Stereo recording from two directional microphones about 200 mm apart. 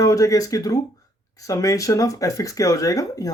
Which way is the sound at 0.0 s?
15° left (ahead or behind).